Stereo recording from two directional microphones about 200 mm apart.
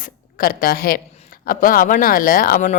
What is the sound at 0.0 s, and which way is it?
A woman's voice, 45° left (ahead or behind).